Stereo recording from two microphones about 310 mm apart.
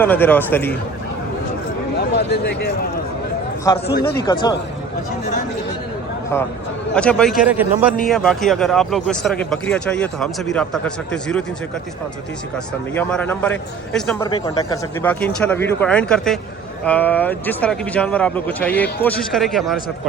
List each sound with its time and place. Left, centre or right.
0.0 s speech: centre
2.0 s speech: left
3.7 s speech: centre
6.9 s speech: centre
13.0 s speech: centre